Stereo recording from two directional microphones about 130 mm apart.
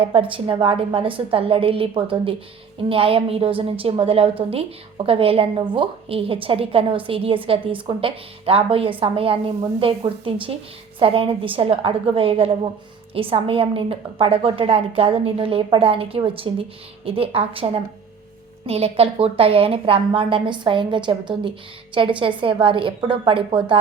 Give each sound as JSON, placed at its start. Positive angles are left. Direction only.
{"t": 0.0, "sound": "a woman's voice", "side_deg": -45}